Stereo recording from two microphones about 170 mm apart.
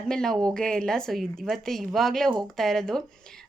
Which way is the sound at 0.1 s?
5° left (ahead or behind).